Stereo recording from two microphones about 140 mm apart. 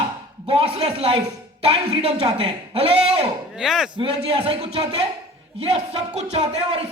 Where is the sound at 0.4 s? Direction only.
45° right (ahead or behind).